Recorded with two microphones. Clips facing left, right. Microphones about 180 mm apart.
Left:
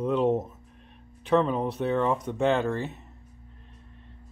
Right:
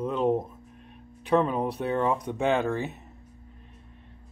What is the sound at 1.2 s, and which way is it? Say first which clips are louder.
Speech: even; 5° right (ahead or behind).